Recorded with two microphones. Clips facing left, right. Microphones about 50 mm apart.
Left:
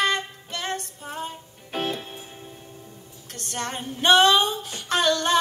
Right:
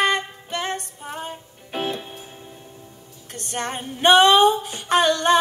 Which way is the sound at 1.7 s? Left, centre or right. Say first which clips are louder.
Right 1 dB; centre.